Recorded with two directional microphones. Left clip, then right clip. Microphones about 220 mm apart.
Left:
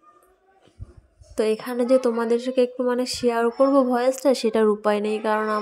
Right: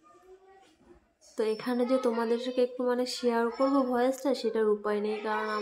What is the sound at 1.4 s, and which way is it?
A woman's voice, 30° left (ahead or behind).